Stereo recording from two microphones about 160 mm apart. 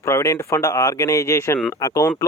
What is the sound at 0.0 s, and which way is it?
Speech, 20° left (ahead or behind).